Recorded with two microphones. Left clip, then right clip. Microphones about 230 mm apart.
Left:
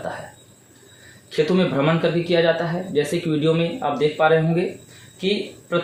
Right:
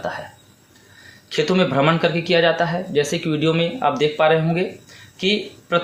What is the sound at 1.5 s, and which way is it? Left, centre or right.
Speech, right.